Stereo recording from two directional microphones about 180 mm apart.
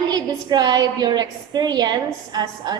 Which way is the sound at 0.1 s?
25° right (ahead or behind).